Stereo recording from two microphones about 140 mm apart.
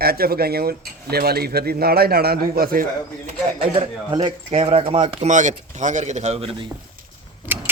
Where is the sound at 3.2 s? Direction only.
40° right (ahead or behind).